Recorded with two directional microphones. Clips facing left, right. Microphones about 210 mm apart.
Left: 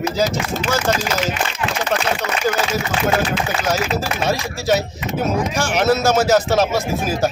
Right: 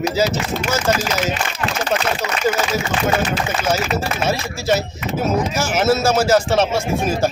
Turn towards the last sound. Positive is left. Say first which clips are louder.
# right 1 dB
turn(degrees=0)  # may be behind; listen again after turning